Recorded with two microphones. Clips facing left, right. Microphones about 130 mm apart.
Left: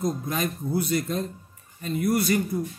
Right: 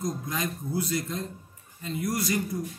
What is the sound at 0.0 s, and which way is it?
A man's voice, 60° left (ahead or behind).